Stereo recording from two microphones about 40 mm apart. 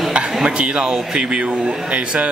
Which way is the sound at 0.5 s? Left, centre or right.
Right.